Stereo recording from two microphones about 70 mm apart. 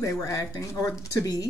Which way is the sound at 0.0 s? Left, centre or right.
Left.